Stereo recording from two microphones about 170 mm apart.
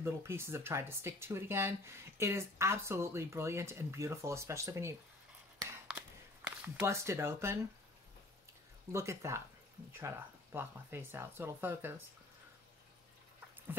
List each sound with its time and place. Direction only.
0.0 s speech: 15° right (ahead or behind)
5.9 s a sound: 10° right (ahead or behind)
8.9 s speech: 15° right (ahead or behind)